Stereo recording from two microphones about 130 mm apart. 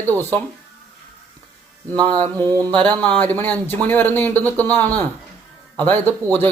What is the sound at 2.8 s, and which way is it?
A man's voice, 10° left (ahead or behind).